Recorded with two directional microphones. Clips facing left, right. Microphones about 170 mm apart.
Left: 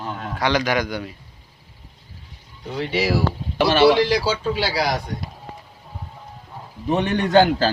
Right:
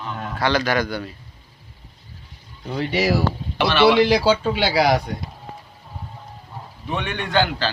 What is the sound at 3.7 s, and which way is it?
Speech, 45° left (ahead or behind).